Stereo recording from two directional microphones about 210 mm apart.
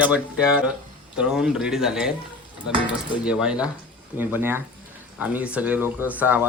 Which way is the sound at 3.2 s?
5° right (ahead or behind).